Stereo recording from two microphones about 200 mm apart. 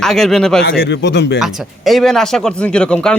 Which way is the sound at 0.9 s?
60° left (ahead or behind).